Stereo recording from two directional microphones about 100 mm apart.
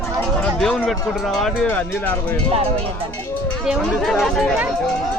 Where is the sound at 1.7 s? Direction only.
20° left (ahead or behind).